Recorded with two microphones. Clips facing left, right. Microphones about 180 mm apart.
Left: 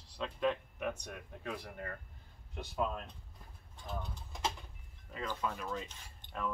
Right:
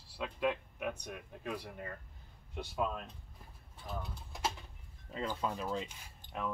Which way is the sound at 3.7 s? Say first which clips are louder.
Even; 5° right (ahead or behind).